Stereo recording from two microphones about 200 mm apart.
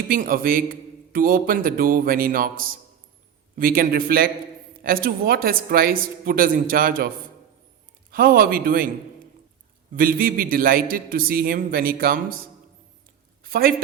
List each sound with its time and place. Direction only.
0.1 s a man's voice: 45° right (ahead or behind)
8.1 s a man's voice: 45° right (ahead or behind)
9.9 s a man's voice: 45° right (ahead or behind)
13.4 s speech: 50° right (ahead or behind)